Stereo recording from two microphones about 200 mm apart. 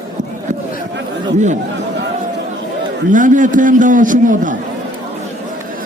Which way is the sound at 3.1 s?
40° right (ahead or behind).